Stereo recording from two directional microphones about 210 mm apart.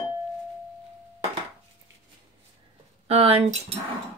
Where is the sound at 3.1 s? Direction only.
30° right (ahead or behind).